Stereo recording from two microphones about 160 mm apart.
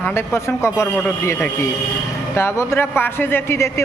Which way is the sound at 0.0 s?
15° left (ahead or behind).